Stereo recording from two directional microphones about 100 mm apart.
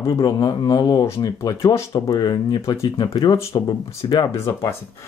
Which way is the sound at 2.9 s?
55° left (ahead or behind).